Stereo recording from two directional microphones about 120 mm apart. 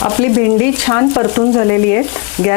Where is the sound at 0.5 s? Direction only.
20° left (ahead or behind).